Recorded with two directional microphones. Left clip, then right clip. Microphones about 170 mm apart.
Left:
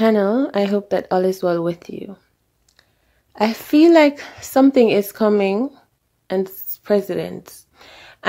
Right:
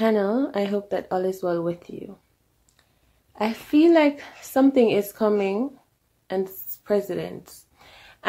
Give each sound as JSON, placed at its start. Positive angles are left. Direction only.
{"t": 0.0, "sound": "a woman's voice", "side_deg": 40}
{"t": 3.3, "sound": "a woman's voice", "side_deg": 45}
{"t": 6.2, "sound": "a sound", "side_deg": 45}